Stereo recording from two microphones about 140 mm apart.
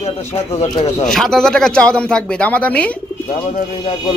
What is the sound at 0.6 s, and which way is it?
Speech, 25° left (ahead or behind).